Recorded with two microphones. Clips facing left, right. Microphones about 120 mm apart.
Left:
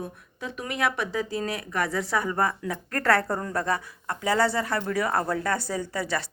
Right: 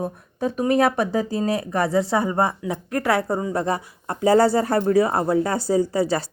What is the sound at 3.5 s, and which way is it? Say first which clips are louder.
Speech: right 4 dB; 25° right (ahead or behind).